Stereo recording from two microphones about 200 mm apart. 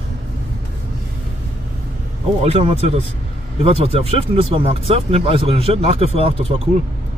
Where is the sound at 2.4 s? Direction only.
30° right (ahead or behind).